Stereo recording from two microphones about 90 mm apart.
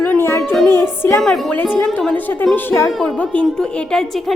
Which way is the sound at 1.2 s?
5° left (ahead or behind).